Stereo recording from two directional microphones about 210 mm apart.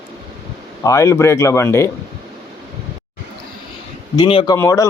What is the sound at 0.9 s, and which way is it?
Speech, 15° left (ahead or behind).